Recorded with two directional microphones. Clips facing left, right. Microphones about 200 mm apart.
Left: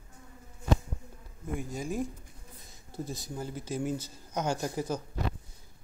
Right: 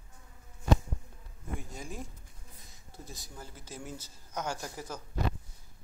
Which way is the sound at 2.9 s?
25° left (ahead or behind).